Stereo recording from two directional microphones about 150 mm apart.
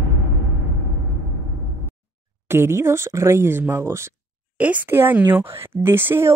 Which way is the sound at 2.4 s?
15° right (ahead or behind).